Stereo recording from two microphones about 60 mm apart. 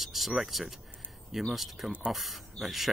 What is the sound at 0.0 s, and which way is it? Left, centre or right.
Speech, centre.